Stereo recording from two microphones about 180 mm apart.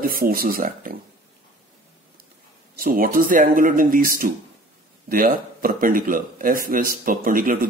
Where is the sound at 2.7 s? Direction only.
55° right (ahead or behind).